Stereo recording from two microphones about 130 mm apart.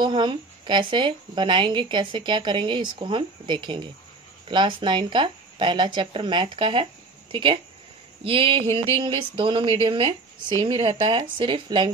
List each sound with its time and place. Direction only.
0.0 s a woman's voice: 35° right (ahead or behind)